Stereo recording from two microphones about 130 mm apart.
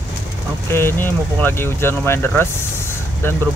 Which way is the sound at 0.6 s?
20° left (ahead or behind).